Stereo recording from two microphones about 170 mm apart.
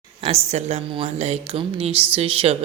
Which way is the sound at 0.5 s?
35° right (ahead or behind).